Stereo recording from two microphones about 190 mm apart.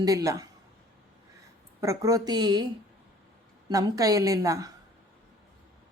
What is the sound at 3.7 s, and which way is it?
A woman's voice, 20° right (ahead or behind).